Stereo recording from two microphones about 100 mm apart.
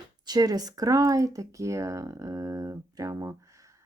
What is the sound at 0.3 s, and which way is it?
Speech, 40° right (ahead or behind).